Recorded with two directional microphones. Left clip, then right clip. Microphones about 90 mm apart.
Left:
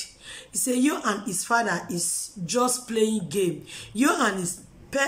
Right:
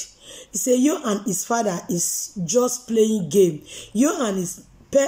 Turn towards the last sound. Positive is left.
turn(degrees=-25)  # may be behind; listen again after turning